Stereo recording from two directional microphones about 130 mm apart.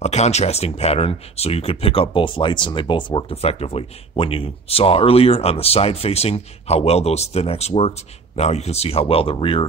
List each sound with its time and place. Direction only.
0.0 s speech: 60° left (ahead or behind); by 9.7 s 40° left (ahead or behind)